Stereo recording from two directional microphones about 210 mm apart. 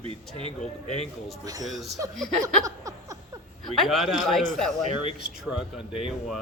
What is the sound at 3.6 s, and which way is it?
Speech, centre (ahead or behind).